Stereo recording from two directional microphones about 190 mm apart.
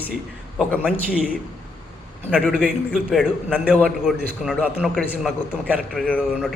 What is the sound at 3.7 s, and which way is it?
Speech, 5° left (ahead or behind).